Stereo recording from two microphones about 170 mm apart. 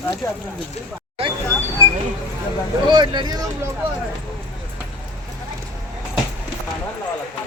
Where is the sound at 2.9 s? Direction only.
25° right (ahead or behind).